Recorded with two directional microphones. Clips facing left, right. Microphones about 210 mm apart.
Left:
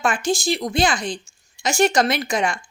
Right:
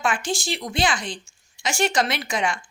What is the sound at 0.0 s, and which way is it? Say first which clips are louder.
A woman's voice: left 4 dB; 40° left (ahead or behind).